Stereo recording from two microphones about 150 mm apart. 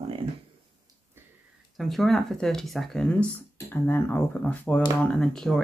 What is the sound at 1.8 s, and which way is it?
Speech, centre (ahead or behind).